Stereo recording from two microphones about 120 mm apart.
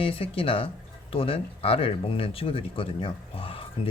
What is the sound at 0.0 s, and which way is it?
Speech, 50° left (ahead or behind).